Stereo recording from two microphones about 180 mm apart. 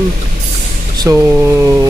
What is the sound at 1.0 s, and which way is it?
Speech, 15° right (ahead or behind).